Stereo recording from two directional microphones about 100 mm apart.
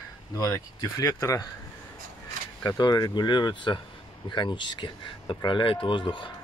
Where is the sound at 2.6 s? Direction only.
40° left (ahead or behind).